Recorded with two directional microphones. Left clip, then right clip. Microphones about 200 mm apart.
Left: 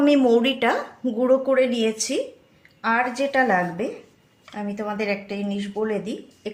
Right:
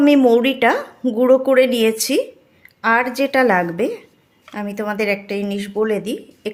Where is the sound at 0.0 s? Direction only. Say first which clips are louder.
Right 5 dB; 30° right (ahead or behind).